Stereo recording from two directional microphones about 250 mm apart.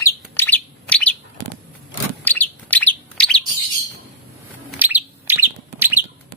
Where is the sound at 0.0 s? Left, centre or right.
Centre.